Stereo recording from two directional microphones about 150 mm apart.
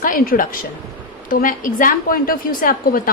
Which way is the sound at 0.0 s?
65° left (ahead or behind).